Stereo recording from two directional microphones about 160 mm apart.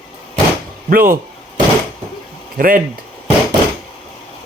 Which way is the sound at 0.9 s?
60° right (ahead or behind).